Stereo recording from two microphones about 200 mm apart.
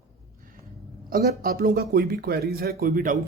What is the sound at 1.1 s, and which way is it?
Speech, 50° right (ahead or behind).